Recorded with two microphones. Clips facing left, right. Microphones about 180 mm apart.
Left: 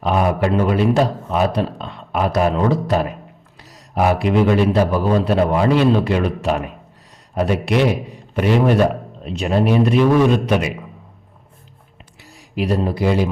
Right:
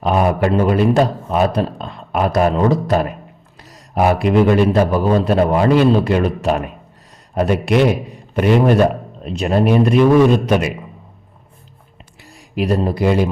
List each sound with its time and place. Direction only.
0.0 s a man's voice: 45° right (ahead or behind)
12.5 s a man's voice: 50° right (ahead or behind)